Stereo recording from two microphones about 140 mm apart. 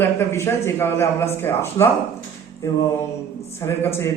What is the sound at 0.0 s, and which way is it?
Speech, 15° left (ahead or behind).